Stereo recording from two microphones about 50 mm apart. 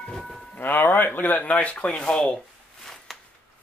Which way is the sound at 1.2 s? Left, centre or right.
Left.